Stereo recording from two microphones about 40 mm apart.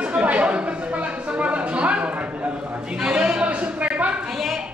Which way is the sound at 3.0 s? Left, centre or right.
Right.